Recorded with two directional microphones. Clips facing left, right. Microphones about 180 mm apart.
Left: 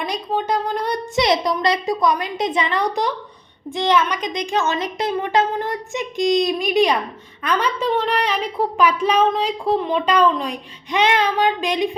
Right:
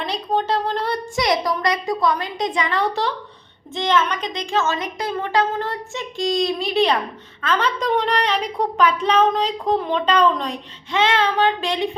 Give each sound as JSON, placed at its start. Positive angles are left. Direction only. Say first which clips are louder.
{"t": 0.0, "sound": "a woman's voice", "louder": "right 1 dB", "side_deg": 15}